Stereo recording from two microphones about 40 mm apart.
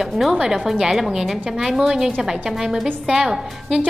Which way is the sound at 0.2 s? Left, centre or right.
Centre.